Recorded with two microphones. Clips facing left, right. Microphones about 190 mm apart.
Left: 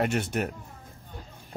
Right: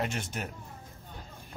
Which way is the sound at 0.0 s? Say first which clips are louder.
Left 7 dB; 65° left (ahead or behind).